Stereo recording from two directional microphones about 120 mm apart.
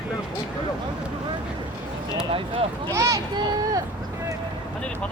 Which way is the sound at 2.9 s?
25° right (ahead or behind).